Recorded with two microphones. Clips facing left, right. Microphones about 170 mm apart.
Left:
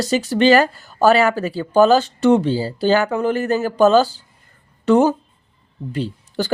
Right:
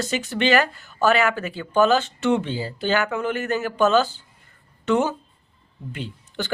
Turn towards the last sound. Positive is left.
turn(degrees=35)  # may be behind; listen again after turning